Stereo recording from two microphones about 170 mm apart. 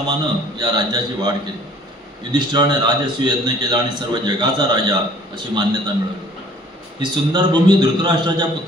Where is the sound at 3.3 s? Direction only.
25° right (ahead or behind).